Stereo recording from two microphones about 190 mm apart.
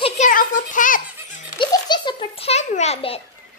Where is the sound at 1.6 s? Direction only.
25° left (ahead or behind).